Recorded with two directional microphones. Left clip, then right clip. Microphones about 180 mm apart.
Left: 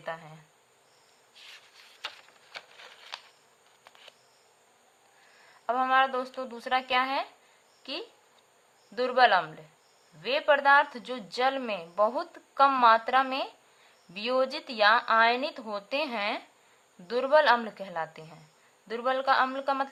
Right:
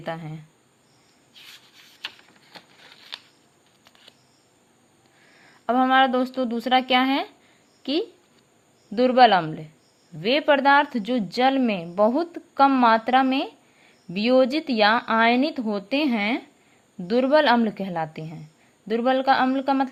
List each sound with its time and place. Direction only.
0.0 s speech: 35° right (ahead or behind)
5.6 s speech: 30° right (ahead or behind)